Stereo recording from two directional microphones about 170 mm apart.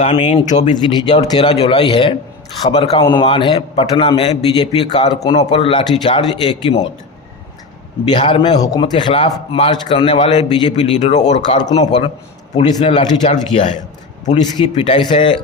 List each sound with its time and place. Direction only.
0.0 s speech: 35° left (ahead or behind)
0.9 s a man's voice: 25° left (ahead or behind)
8.0 s a man's voice: 30° left (ahead or behind)
10.8 s speech: 40° left (ahead or behind)
11.3 s a man's voice: 30° left (ahead or behind)